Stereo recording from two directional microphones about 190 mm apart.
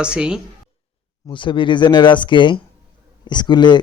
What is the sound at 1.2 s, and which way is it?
Speech, 25° left (ahead or behind).